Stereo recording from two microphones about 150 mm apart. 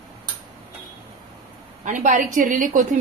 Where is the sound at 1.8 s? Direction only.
60° right (ahead or behind).